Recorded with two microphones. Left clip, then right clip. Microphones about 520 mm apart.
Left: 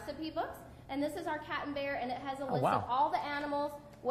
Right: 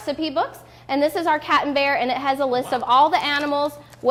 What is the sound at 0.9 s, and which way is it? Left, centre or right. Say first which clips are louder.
A woman's voice: right 17 dB; right.